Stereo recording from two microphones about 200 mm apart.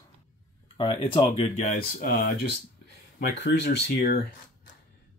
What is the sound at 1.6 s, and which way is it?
Speech, 45° left (ahead or behind).